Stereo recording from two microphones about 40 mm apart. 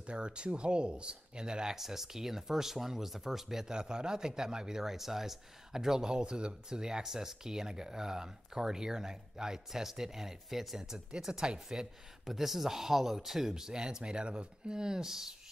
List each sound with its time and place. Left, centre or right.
0.0 s speech: right
12.3 s speech: centre